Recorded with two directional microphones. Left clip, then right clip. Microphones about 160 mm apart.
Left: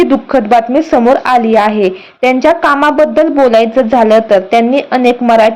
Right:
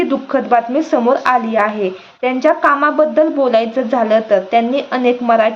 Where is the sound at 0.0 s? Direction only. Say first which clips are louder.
Left 6 dB; 30° left (ahead or behind).